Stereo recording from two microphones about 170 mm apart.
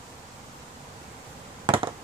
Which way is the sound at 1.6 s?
30° right (ahead or behind).